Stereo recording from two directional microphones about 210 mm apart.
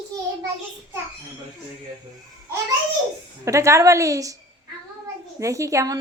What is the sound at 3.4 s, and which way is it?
Speech, 15° right (ahead or behind).